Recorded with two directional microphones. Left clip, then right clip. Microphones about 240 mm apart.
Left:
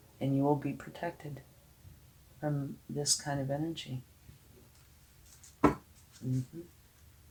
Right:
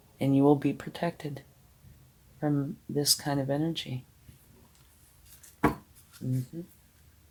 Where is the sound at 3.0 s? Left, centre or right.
Right.